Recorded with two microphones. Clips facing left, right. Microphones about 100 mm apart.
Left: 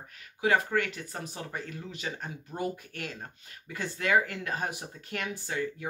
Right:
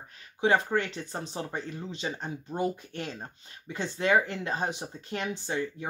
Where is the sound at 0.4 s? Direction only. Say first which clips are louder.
Right 1 dB; 25° right (ahead or behind).